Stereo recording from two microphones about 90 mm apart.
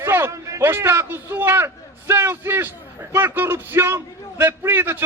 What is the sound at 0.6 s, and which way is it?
A man's voice, 25° right (ahead or behind).